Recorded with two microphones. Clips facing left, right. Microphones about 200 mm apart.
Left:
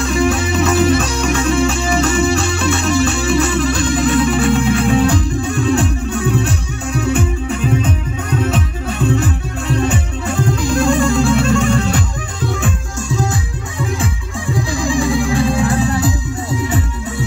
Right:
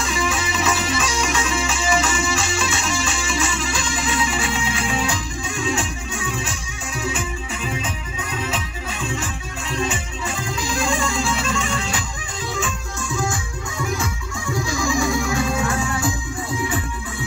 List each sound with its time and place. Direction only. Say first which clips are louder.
0.0 s music: left 8 dB; 60° left (ahead or behind)
13.1 s music: left 5 dB; 35° left (ahead or behind)
14.5 s music: left 4 dB; 30° left (ahead or behind)